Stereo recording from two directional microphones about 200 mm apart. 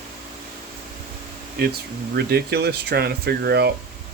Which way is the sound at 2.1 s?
55° right (ahead or behind).